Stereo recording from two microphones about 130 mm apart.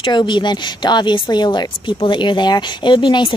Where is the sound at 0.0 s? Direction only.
35° left (ahead or behind).